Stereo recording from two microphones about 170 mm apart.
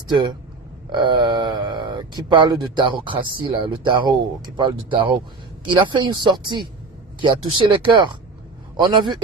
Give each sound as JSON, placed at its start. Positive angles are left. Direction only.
{"t": 0.1, "sound": "speech", "side_deg": -25}